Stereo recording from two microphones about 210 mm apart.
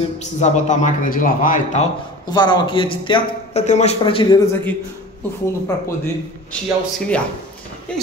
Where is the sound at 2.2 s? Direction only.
20° left (ahead or behind).